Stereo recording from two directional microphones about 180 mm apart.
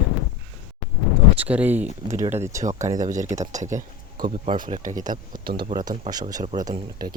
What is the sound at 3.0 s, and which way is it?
Speech, 45° right (ahead or behind).